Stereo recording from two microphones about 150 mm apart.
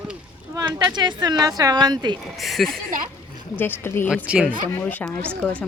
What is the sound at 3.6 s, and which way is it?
Speech, 15° left (ahead or behind).